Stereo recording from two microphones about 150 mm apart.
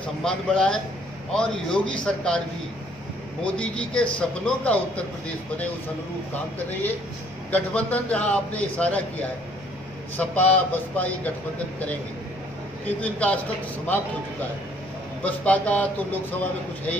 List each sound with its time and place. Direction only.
0.2 s a man's voice: 5° left (ahead or behind)
3.4 s a man's voice: 5° left (ahead or behind)
7.5 s a man's voice: 10° left (ahead or behind)
12.8 s a man's voice: 10° left (ahead or behind)